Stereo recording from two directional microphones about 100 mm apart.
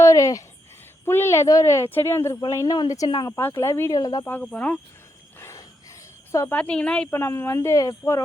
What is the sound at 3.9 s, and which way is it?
Speech, 40° left (ahead or behind).